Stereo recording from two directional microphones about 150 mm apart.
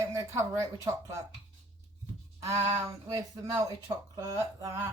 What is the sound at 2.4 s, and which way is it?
Speech, 20° right (ahead or behind).